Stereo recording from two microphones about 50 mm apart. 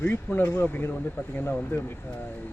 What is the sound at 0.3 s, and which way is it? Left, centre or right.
Speech, left.